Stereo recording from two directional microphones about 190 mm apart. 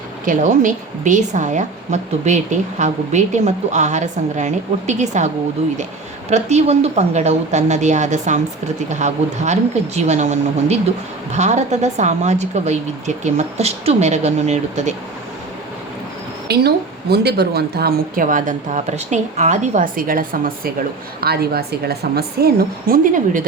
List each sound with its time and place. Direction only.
0.3 s a woman's voice: 40° right (ahead or behind)
6.3 s a woman's voice: 35° right (ahead or behind)
16.5 s a woman's voice: 60° right (ahead or behind)